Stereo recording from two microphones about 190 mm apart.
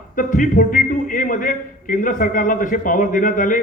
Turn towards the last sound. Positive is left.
turn(degrees=45)  # may be behind; listen again after turning